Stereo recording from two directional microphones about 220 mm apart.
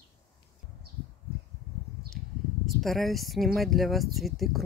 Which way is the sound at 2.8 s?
Centre (ahead or behind).